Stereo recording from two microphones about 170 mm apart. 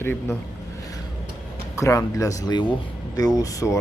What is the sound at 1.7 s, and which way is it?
Speech, 20° left (ahead or behind).